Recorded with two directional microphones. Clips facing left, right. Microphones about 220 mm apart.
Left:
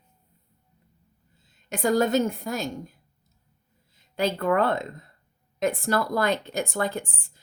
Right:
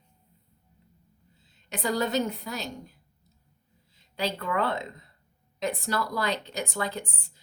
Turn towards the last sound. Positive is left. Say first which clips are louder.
# left 4 dB
turn(degrees=50)  # may be behind; listen again after turning